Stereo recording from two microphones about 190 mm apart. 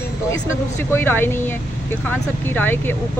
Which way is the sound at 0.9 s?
10° left (ahead or behind).